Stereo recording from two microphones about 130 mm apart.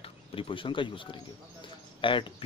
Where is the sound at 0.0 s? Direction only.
45° left (ahead or behind).